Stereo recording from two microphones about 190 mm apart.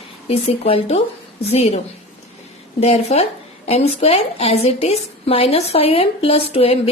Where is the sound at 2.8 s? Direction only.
35° left (ahead or behind).